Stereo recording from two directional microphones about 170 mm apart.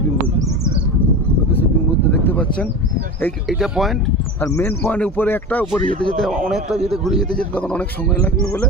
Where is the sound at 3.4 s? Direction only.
5° right (ahead or behind).